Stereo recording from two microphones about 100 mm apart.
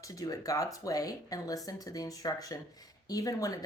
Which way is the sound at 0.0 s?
35° left (ahead or behind).